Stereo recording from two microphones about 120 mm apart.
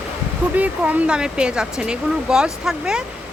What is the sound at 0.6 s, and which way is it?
Speech, 15° right (ahead or behind).